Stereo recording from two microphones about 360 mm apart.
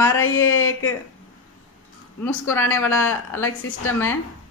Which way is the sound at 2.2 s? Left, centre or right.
Centre.